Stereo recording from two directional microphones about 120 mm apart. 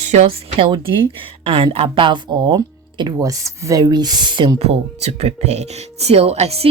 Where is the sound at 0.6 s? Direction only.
40° right (ahead or behind).